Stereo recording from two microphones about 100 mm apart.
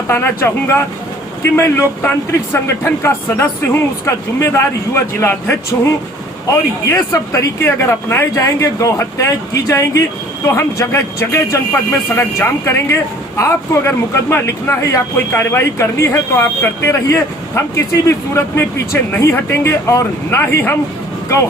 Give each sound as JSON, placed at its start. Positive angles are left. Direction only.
{"t": 0.1, "sound": "speech", "side_deg": 25}
{"t": 19.1, "sound": "speech", "side_deg": 25}